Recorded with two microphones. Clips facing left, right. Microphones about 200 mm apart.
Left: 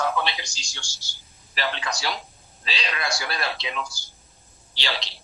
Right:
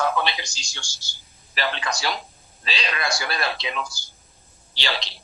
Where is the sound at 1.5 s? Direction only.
60° right (ahead or behind); by 2.1 s 75° right (ahead or behind).